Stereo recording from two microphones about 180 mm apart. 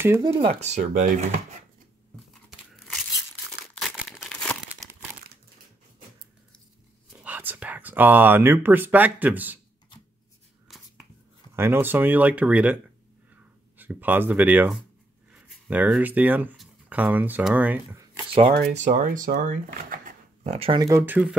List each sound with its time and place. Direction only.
0.2 s speech: 30° right (ahead or behind)
2.7 s tearing: centre (ahead or behind)
3.7 s crumpling: centre (ahead or behind)
7.2 s speech: 10° right (ahead or behind)
10.7 s a sound: centre (ahead or behind)
11.5 s speech: 15° right (ahead or behind)
18.7 s speech: 45° right (ahead or behind)
20.5 s speech: 30° right (ahead or behind)
20.8 s speech: 15° right (ahead or behind)